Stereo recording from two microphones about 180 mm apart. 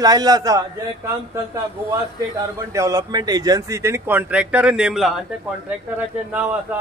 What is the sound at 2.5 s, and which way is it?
Speech, 15° right (ahead or behind).